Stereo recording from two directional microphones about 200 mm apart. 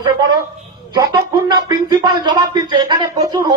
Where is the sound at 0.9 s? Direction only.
20° right (ahead or behind).